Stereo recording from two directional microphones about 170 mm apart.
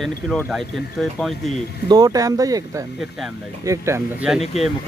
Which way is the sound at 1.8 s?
20° right (ahead or behind).